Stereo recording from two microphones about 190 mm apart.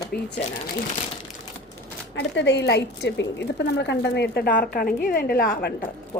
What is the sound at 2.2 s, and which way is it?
A woman's voice, 70° left (ahead or behind).